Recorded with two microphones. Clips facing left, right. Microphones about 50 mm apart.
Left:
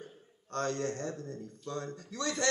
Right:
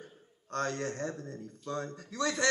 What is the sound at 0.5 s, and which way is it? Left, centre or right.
Speech, right.